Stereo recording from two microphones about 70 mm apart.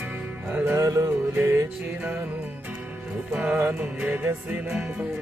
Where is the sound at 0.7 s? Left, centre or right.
Right.